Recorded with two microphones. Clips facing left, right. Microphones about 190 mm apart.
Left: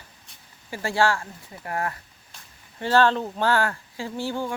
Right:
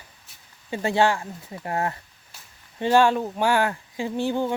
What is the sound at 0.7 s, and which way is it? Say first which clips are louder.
Speech: right 2 dB; 20° right (ahead or behind).